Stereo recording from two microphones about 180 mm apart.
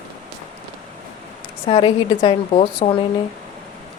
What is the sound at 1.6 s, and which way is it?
Speech, 30° left (ahead or behind).